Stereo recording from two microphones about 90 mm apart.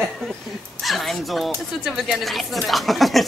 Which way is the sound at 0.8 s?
Centre (ahead or behind).